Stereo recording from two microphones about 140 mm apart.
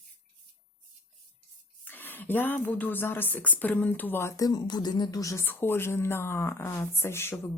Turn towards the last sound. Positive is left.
turn(degrees=15)  # may be behind; listen again after turning